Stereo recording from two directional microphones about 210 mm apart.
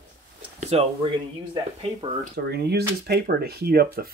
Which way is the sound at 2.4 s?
50° right (ahead or behind).